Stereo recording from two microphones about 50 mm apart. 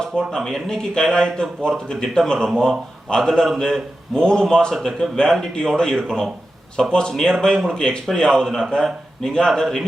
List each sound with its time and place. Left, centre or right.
0.0 s speech: centre